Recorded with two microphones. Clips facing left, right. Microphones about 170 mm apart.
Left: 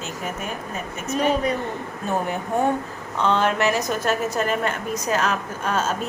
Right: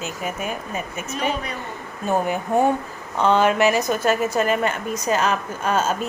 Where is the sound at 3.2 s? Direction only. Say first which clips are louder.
Right 3 dB; 5° right (ahead or behind).